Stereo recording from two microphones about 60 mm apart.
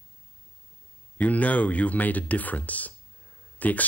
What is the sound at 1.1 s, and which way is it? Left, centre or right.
Speech, left.